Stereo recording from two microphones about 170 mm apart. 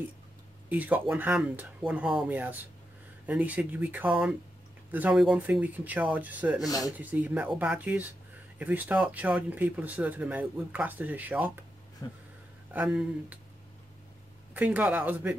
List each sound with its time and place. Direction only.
0.7 s speech: 10° right (ahead or behind)
12.0 s speech: 20° left (ahead or behind)
12.7 s speech: 10° right (ahead or behind)
14.5 s speech: 10° right (ahead or behind)